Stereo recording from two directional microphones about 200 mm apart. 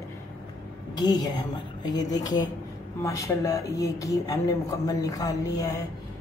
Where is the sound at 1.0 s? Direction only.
20° left (ahead or behind).